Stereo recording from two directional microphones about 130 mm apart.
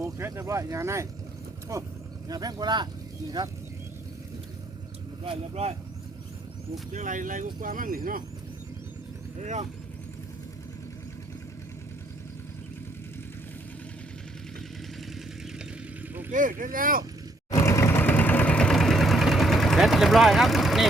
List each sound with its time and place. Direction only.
0.0 s speech: 20° right (ahead or behind)
5.2 s speech: 45° right (ahead or behind)
6.9 s speech: 80° right
9.4 s speech: 65° right (ahead or behind)
16.3 s speech: 90° right
17.5 s engine: 20° left (ahead or behind); by 20.8 s centre (ahead or behind)